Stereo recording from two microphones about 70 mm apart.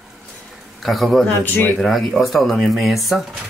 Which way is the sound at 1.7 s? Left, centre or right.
Centre.